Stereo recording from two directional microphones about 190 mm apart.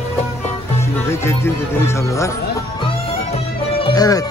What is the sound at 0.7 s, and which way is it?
Speech, 15° left (ahead or behind).